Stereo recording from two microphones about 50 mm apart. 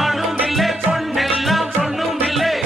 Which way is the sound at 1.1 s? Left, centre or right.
Centre.